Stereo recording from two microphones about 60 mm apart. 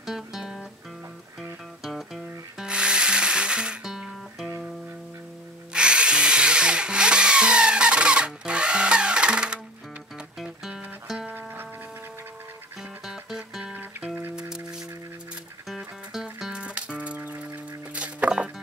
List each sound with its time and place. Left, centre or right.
0.0 s music: centre
1.8 s music: centre
2.6 s music: centre
5.7 s wood: centre
10.4 s music: centre
13.0 s music: centre
13.7 s music: right
14.3 s music: centre
16.1 s music: centre